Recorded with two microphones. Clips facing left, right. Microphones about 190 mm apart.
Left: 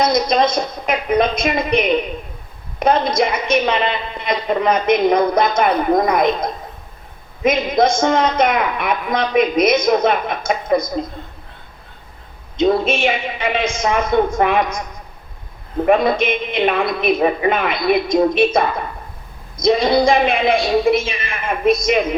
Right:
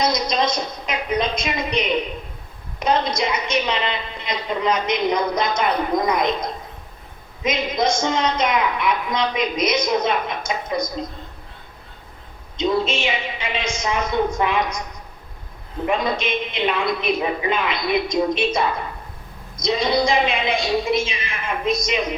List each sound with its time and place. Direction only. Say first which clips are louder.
0.0 s a woman's voice: left 5 dB; 55° left (ahead or behind)
12.5 s a woman's voice: left 5 dB; 55° left (ahead or behind)
15.9 s a woman's voice: left 7 dB; 55° left (ahead or behind)